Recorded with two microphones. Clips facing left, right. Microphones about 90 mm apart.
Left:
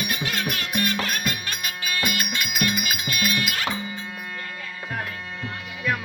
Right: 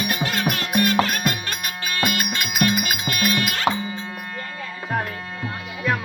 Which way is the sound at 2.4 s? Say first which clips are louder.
Right 5 dB; 45° right (ahead or behind).